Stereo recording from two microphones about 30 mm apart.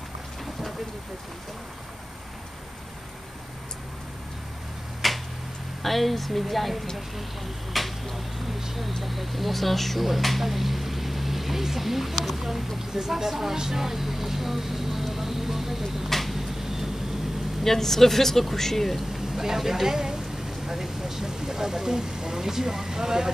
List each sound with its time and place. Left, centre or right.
5.0 s tick-tock: centre
5.8 s a woman's voice: centre
7.7 s tick-tock: centre
9.0 s a woman's voice: centre
16.1 s a sound: centre
16.3 s a sound: centre
17.6 s speech: centre
19.1 s speech: centre